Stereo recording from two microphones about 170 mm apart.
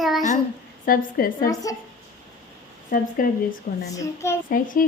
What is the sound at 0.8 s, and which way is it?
Speech, 55° left (ahead or behind).